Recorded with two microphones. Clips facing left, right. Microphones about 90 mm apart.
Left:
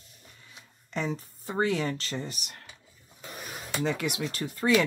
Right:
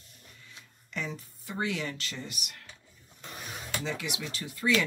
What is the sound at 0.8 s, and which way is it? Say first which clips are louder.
Speech: left 5 dB; 35° left (ahead or behind).